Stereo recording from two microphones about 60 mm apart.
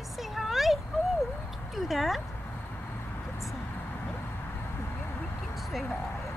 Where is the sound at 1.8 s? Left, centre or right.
Centre.